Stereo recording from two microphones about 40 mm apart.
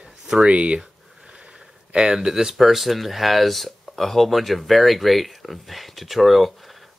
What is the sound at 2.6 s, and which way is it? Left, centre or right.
Speech, centre.